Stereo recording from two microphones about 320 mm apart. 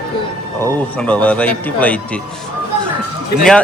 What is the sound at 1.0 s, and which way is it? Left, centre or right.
Speech, centre.